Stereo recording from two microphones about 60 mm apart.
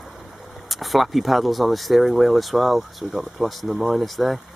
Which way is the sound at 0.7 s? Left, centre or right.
Centre.